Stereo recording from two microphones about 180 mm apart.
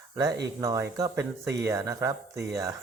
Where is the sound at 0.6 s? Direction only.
20° right (ahead or behind).